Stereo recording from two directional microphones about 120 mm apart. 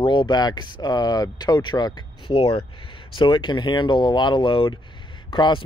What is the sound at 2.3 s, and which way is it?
Speech, 50° left (ahead or behind).